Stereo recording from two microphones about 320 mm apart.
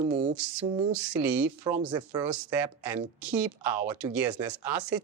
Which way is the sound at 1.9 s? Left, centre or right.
Centre.